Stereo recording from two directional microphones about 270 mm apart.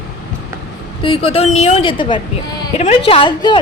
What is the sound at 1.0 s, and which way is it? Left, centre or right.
A woman's voice, centre.